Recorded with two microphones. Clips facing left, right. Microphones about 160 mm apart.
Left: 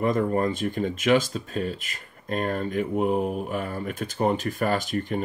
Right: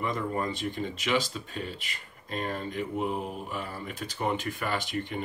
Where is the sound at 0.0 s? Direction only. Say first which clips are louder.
Left 8 dB; 45° left (ahead or behind).